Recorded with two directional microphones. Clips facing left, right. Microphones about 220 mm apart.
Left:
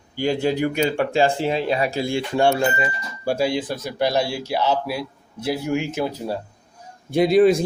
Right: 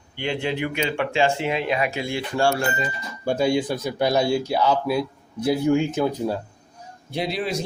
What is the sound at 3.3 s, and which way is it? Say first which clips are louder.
Speech: right 1 dB; 5° left (ahead or behind).